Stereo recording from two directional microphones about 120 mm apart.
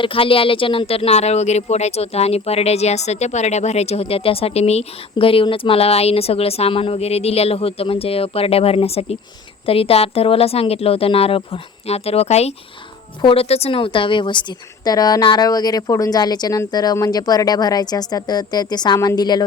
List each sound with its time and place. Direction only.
0.0 s a woman's voice: 45° left (ahead or behind)